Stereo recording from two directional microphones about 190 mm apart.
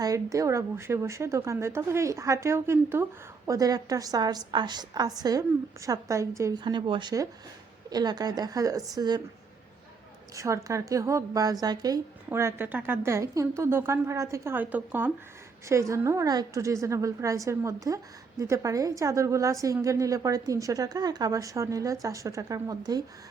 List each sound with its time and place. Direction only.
0.0 s a woman's voice: 15° right (ahead or behind)
10.3 s a woman's voice: 15° right (ahead or behind)